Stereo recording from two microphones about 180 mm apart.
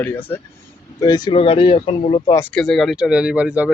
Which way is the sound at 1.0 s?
20° left (ahead or behind).